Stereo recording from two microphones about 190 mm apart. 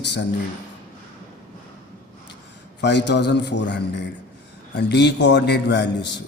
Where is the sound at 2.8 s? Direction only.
65° left (ahead or behind).